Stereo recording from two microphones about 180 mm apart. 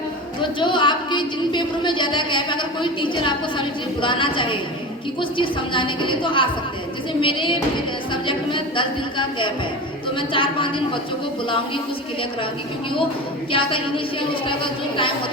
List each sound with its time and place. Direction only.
0.6 s a woman's voice: 25° left (ahead or behind)
13.5 s a woman's voice: 30° left (ahead or behind)